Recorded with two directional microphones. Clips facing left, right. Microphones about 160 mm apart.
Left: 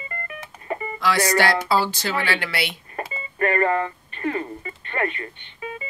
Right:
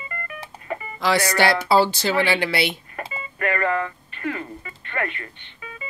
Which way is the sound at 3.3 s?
35° left (ahead or behind).